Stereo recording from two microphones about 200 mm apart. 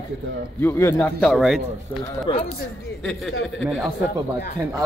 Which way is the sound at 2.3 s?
25° left (ahead or behind).